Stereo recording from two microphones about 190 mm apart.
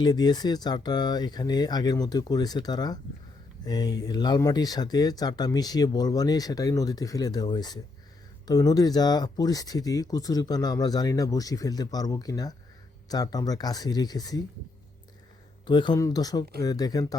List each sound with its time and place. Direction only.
0.0 s speech: 20° left (ahead or behind)
15.6 s speech: 25° left (ahead or behind)